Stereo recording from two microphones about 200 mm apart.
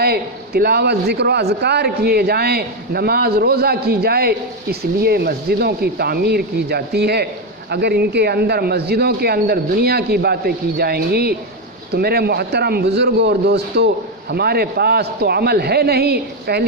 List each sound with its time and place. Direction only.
0.0 s a man's voice: 50° right (ahead or behind)